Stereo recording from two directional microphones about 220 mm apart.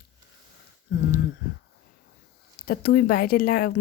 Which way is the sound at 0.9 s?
50° left (ahead or behind).